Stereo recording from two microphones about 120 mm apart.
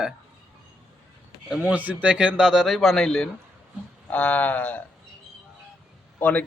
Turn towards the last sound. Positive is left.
turn(degrees=15)  # may be behind; listen again after turning